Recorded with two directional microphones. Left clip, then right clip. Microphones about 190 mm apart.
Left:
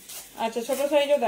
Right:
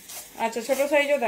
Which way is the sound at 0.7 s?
10° right (ahead or behind).